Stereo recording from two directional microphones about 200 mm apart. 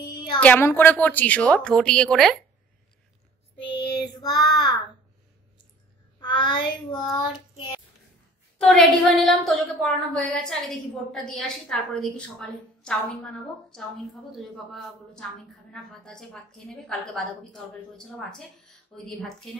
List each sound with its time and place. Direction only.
0.0 s a sound: 20° left (ahead or behind)
0.4 s a woman's voice: 10° left (ahead or behind)
3.7 s child singing: 20° left (ahead or behind)
6.2 s a child's voice: 25° left (ahead or behind)
7.3 s child singing: 25° left (ahead or behind)
8.5 s a woman's voice: 5° left (ahead or behind)